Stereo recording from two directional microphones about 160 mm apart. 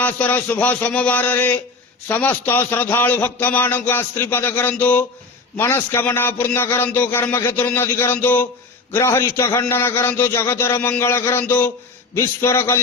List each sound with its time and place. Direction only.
0.0 s a man's voice: 10° left (ahead or behind)